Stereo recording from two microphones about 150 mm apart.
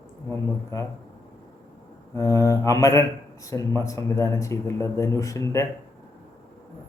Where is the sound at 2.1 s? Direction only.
20° left (ahead or behind).